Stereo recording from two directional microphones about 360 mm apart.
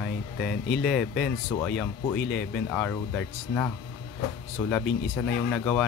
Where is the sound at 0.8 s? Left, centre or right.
Centre.